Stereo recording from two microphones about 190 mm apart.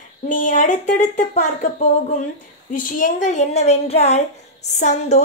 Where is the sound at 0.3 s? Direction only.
40° left (ahead or behind).